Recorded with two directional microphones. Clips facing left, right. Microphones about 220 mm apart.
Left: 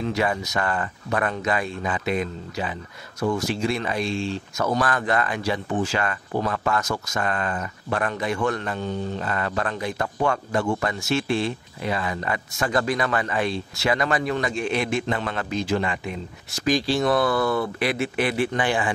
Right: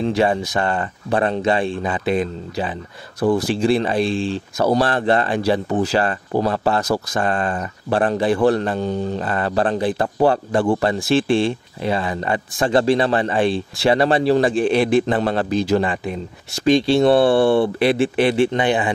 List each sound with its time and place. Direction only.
0.0 s a man's voice: 30° right (ahead or behind)